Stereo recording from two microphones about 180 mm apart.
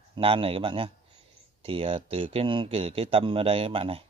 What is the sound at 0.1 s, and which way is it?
Speech, 30° right (ahead or behind).